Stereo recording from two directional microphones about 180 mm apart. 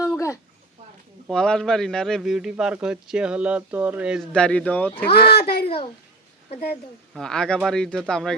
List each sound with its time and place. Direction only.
0.0 s a sound: 15° left (ahead or behind)
1.3 s a man's voice: 5° left (ahead or behind)
4.3 s speech: 5° left (ahead or behind)
5.0 s a child's voice: 60° left (ahead or behind)
5.6 s a child's voice: 30° left (ahead or behind)
7.1 s a man's voice: 5° left (ahead or behind)